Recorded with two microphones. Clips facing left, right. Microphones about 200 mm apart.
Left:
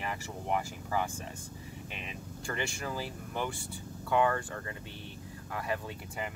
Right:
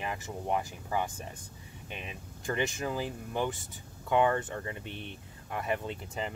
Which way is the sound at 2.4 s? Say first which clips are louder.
Right 5 dB; 20° right (ahead or behind).